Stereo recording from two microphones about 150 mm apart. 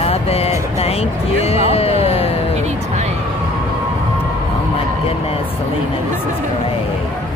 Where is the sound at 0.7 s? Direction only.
45° left (ahead or behind).